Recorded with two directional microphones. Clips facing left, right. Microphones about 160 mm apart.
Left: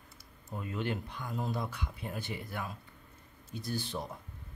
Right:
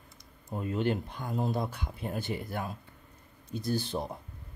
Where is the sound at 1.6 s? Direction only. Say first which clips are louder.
Right 4 dB; 45° right (ahead or behind).